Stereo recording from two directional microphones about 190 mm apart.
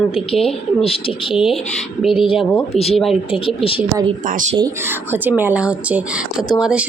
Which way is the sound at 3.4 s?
30° left (ahead or behind).